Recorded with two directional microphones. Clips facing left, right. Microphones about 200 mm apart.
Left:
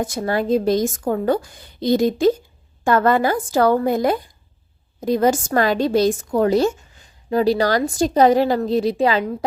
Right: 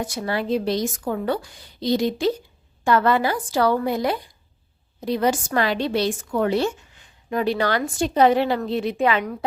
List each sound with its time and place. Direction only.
0.0 s a woman's voice: 45° left (ahead or behind); by 9.4 s 30° left (ahead or behind)